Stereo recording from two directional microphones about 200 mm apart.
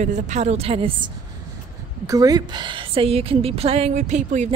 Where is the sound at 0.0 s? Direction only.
35° right (ahead or behind).